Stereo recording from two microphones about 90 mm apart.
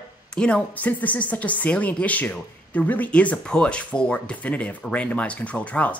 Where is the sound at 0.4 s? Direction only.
15° left (ahead or behind).